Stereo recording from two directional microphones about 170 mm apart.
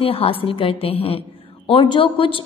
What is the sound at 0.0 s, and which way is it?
A woman's voice, 35° left (ahead or behind).